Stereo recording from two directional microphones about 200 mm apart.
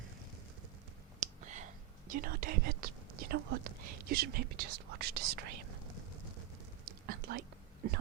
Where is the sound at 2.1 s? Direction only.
45° right (ahead or behind).